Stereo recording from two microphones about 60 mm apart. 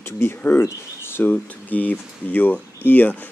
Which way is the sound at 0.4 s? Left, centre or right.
Left.